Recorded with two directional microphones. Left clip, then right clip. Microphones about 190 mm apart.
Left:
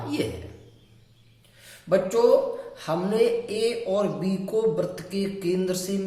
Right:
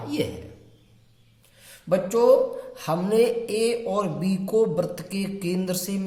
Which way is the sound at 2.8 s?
40° right (ahead or behind).